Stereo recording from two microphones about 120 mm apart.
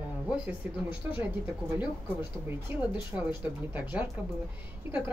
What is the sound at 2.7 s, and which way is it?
A woman's voice, 20° right (ahead or behind).